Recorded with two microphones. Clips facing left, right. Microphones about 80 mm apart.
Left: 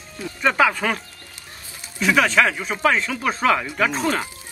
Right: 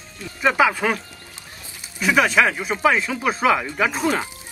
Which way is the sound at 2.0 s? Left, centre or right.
Centre.